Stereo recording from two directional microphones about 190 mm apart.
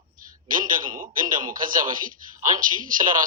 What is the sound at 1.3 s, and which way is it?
Speech, 45° right (ahead or behind).